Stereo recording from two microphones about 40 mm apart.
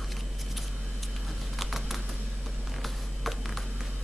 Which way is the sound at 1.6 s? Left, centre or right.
Centre.